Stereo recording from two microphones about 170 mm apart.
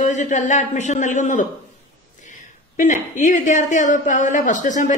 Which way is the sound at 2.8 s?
50° left (ahead or behind).